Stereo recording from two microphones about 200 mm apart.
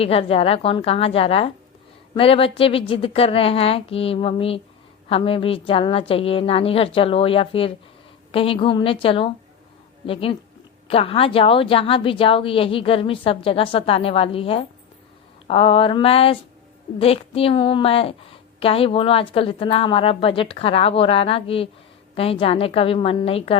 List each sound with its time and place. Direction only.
0.0 s a woman's voice: 30° left (ahead or behind)